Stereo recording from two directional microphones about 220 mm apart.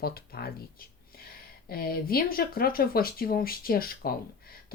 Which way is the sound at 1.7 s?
40° left (ahead or behind).